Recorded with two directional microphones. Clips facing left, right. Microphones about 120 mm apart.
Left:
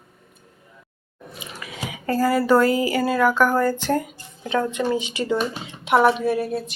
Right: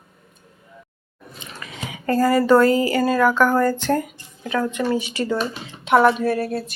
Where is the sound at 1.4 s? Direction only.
10° left (ahead or behind).